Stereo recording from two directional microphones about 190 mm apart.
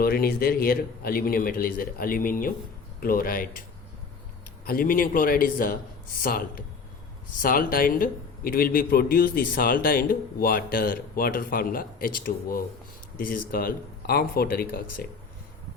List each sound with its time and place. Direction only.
0.0 s a man's voice: 50° left (ahead or behind)
4.6 s a man's voice: 50° left (ahead or behind)